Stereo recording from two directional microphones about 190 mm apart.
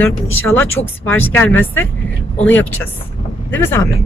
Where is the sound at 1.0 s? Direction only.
10° left (ahead or behind).